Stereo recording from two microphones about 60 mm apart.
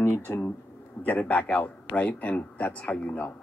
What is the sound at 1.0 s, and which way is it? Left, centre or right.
A man's voice, left.